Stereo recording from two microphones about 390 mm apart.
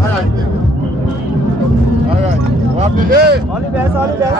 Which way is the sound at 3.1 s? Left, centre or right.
Right.